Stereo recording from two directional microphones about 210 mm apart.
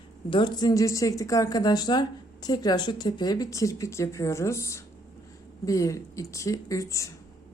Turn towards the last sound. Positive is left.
turn(degrees=15)  # may be behind; listen again after turning